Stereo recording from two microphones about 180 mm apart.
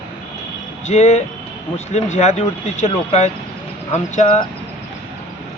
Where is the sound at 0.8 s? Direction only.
40° left (ahead or behind).